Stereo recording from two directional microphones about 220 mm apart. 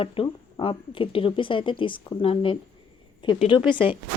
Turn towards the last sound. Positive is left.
turn(degrees=20)  # may be behind; listen again after turning